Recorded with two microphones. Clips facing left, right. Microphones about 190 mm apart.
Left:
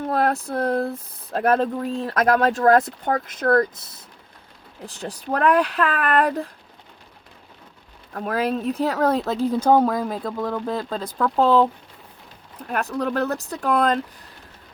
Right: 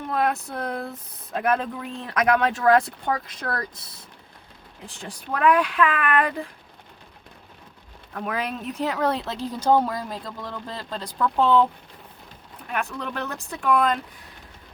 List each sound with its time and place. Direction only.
0.1 s speech: 40° left (ahead or behind)
4.9 s speech: 40° left (ahead or behind)
8.1 s speech: 35° left (ahead or behind)
12.6 s speech: 40° left (ahead or behind)